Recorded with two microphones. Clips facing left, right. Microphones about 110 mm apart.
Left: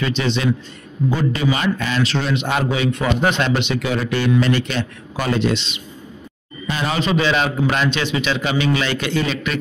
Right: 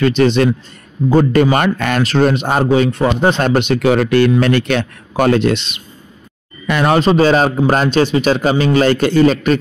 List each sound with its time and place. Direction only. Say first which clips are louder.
0.0 s a man's voice: right 8 dB; 55° right (ahead or behind); by 3.4 s 35° right (ahead or behind)
3.4 s speech: right 7 dB; 50° right (ahead or behind)
7.0 s a man's voice: right 6 dB; 40° right (ahead or behind)